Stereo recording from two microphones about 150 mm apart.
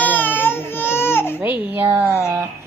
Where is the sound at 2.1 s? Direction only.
15° left (ahead or behind).